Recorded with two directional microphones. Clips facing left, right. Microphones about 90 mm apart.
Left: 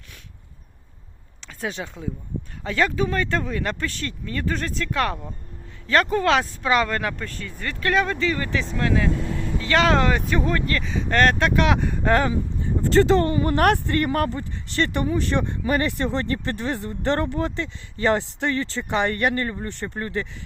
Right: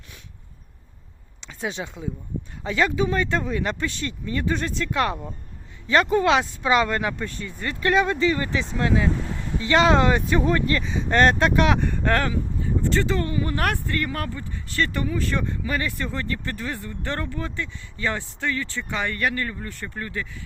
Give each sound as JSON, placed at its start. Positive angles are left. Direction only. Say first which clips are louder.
{"t": 1.6, "sound": "speech", "louder": "even", "side_deg": -20}
{"t": 2.6, "sound": "speech", "louder": "even", "side_deg": -10}
{"t": 11.7, "sound": "speech", "louder": "left 1 dB", "side_deg": 5}
{"t": 13.0, "sound": "speech", "louder": "left 7 dB", "side_deg": 35}
{"t": 13.8, "sound": "speech", "louder": "left 5 dB", "side_deg": 30}
{"t": 15.9, "sound": "speech", "louder": "left 5 dB", "side_deg": 25}